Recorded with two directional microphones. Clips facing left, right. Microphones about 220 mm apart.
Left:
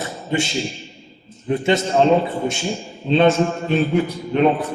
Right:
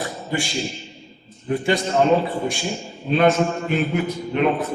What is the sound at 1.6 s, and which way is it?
Speech, 25° left (ahead or behind).